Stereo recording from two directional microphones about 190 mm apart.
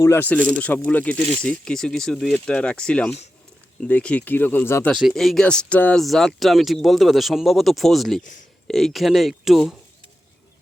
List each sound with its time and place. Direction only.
0.0 s speech: 10° left (ahead or behind)
4.9 s speech: centre (ahead or behind)
8.2 s speech: 40° left (ahead or behind)
8.6 s speech: centre (ahead or behind)